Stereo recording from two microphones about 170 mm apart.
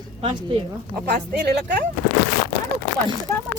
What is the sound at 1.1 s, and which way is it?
Speech, 75° right (ahead or behind).